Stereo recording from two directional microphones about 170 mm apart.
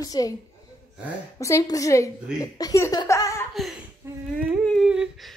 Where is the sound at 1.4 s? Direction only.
20° left (ahead or behind).